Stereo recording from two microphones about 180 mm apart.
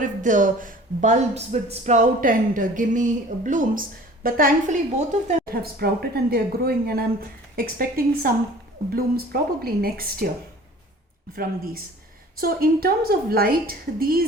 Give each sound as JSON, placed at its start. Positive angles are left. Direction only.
{"t": 0.0, "sound": "speech", "side_deg": -45}
{"t": 5.5, "sound": "speech", "side_deg": -60}
{"t": 11.3, "sound": "speech", "side_deg": -55}